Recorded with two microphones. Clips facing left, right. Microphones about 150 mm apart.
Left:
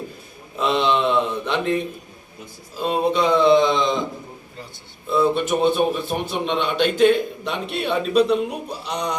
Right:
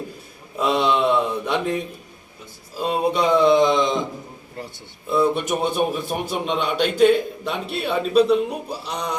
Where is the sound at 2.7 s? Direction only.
5° right (ahead or behind).